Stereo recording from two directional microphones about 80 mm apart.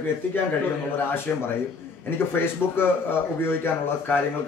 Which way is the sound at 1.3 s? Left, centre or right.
Left.